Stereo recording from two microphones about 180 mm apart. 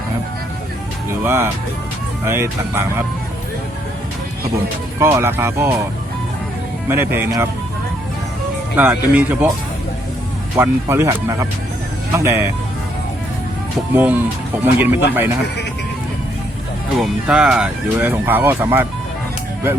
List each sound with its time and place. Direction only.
1.2 s speech: 15° right (ahead or behind)
4.9 s speech: 15° right (ahead or behind)
6.8 s speech: 10° right (ahead or behind)
8.7 s speech: 10° right (ahead or behind)
10.6 s speech: 15° right (ahead or behind)
13.9 s speech: 10° right (ahead or behind)
17.0 s speech: 5° right (ahead or behind)